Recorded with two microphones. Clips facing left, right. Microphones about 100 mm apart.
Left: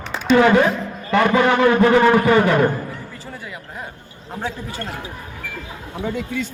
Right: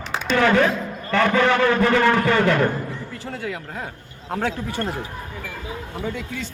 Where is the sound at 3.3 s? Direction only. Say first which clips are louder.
Right 4 dB; 90° right.